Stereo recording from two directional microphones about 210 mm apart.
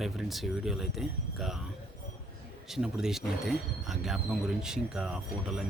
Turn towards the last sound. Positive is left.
turn(degrees=0)  # may be behind; listen again after turning